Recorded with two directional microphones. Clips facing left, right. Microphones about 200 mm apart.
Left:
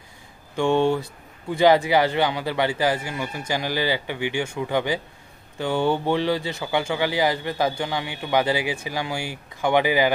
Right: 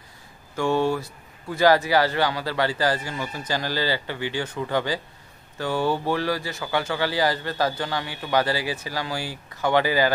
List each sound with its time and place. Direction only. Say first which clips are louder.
0.6 s speech: left 2 dB; 20° left (ahead or behind)